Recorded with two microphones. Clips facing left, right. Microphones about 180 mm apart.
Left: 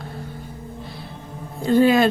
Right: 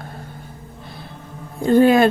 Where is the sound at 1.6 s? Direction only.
50° right (ahead or behind).